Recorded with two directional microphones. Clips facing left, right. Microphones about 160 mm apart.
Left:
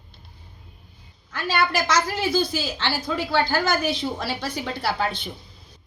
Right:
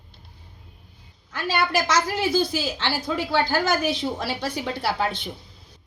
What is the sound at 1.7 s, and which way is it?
A woman's voice, 15° right (ahead or behind).